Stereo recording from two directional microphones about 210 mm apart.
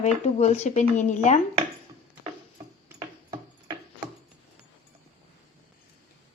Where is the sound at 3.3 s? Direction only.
20° right (ahead or behind).